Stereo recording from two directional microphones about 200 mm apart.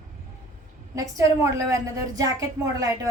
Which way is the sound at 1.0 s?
15° right (ahead or behind).